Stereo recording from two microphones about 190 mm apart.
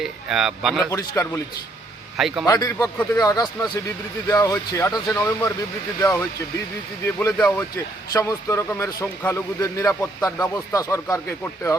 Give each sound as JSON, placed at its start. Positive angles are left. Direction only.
{"t": 0.0, "sound": "speech", "side_deg": -5}
{"t": 1.2, "sound": "speech", "side_deg": 10}
{"t": 2.1, "sound": "speech", "side_deg": 0}
{"t": 2.5, "sound": "speech", "side_deg": 20}